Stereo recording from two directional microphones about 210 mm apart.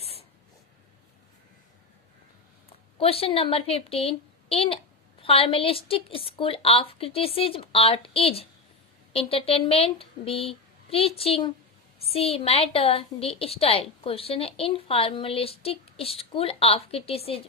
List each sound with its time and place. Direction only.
0.0 s spray: 30° left (ahead or behind)
2.6 s a woman's voice: 25° left (ahead or behind)